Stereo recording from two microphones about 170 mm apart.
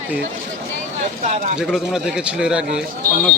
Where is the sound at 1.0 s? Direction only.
45° right (ahead or behind).